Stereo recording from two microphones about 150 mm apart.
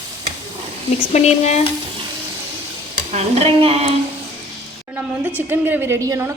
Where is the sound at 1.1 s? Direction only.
45° left (ahead or behind).